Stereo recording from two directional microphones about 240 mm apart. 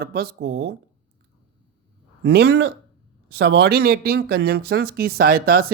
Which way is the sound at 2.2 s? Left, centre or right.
Right.